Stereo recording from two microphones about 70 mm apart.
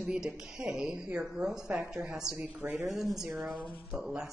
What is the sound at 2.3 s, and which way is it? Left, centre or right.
Speech, centre.